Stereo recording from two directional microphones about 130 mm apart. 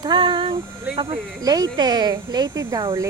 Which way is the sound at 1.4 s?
30° right (ahead or behind).